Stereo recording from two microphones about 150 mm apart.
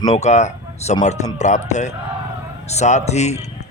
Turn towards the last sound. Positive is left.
turn(degrees=50)  # may be behind; listen again after turning